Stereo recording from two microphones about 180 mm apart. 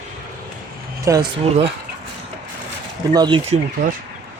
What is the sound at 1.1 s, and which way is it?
Speech, 15° right (ahead or behind).